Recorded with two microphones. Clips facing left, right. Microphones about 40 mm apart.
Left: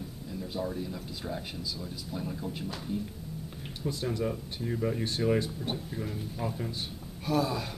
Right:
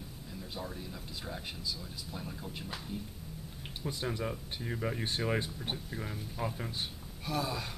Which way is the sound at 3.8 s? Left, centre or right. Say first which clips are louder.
Left 4 dB; centre.